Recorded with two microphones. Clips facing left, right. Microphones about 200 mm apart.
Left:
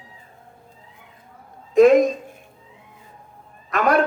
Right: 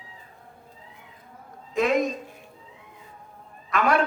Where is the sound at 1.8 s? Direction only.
50° left (ahead or behind).